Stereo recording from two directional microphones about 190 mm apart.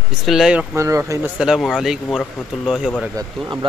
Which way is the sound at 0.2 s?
Centre (ahead or behind).